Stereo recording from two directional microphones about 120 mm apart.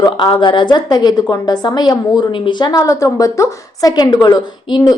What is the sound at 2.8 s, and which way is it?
A woman's voice, 25° left (ahead or behind).